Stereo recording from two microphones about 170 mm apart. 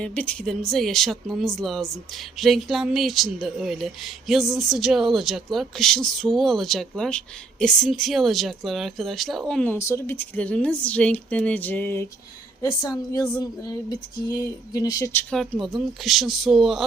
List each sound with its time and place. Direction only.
0.0 s speech: 5° left (ahead or behind)
9.7 s a woman's voice: 15° left (ahead or behind)
15.3 s speech: centre (ahead or behind)